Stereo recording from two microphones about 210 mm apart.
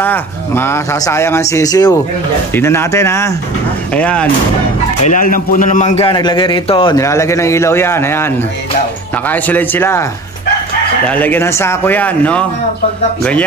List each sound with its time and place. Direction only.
0.0 s speech: 10° left (ahead or behind)
5.0 s a man's voice: 40° left (ahead or behind); by 8.3 s 10° left (ahead or behind)
9.3 s speech: 10° left (ahead or behind)
11.1 s speech: 10° left (ahead or behind)